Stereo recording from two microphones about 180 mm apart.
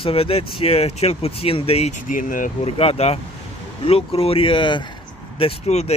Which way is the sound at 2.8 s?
35° left (ahead or behind).